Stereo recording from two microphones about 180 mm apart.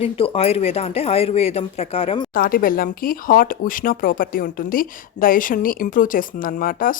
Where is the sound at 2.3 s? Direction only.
50° left (ahead or behind).